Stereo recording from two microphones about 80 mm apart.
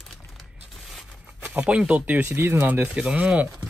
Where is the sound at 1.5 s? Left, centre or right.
Centre.